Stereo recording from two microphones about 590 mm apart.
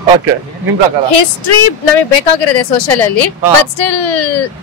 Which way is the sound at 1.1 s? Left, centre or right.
Left.